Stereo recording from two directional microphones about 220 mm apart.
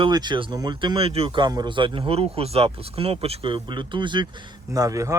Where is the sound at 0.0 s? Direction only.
20° right (ahead or behind).